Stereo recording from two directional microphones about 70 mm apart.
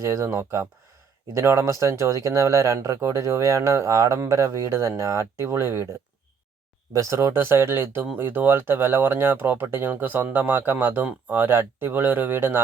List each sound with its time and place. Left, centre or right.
0.0 s speech: right